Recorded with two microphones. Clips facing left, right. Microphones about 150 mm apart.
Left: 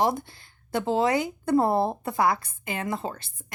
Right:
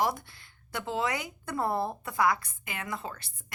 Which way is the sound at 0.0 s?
25° left (ahead or behind).